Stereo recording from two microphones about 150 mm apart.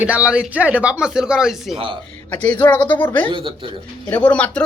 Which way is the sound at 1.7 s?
35° right (ahead or behind).